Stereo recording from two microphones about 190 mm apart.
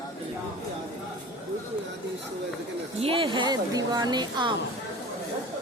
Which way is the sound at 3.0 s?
25° right (ahead or behind).